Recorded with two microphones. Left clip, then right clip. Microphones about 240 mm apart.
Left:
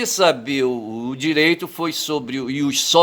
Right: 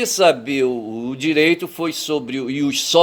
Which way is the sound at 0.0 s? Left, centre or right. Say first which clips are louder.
Right 2 dB; centre.